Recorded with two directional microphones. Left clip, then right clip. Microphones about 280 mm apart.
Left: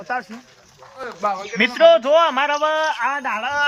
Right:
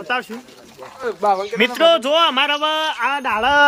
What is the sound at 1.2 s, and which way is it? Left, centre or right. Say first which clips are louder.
Speech: right 5 dB; right.